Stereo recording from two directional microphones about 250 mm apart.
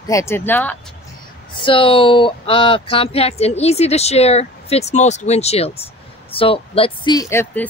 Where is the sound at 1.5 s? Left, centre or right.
Centre.